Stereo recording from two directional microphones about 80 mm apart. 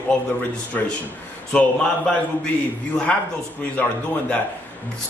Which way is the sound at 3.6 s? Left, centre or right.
Centre.